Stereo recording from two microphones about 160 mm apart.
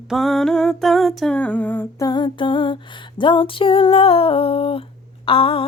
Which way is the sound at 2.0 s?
30° left (ahead or behind).